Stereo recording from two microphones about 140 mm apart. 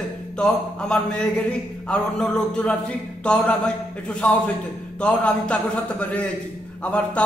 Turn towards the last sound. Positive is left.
turn(degrees=10)  # may be behind; listen again after turning